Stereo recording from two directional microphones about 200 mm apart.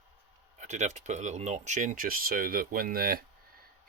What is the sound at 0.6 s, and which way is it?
Speech, 35° right (ahead or behind).